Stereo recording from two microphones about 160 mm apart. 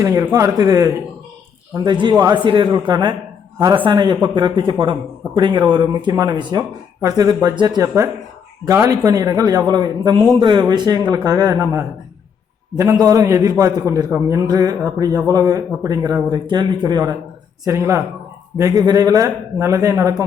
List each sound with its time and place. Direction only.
0.0 s a man's voice: 20° right (ahead or behind)